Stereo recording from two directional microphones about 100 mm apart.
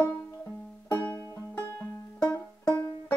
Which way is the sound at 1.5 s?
20° left (ahead or behind).